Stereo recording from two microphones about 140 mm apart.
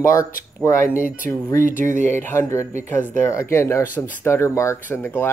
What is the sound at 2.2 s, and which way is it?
Speech, 20° left (ahead or behind).